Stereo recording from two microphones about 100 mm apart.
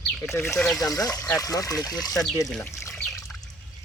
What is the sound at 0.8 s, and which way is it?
Speech, 35° left (ahead or behind).